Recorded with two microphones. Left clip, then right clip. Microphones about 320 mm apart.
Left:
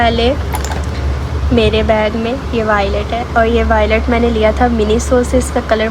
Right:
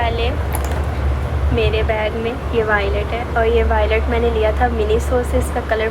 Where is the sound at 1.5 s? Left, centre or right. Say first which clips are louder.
Left 7 dB; centre.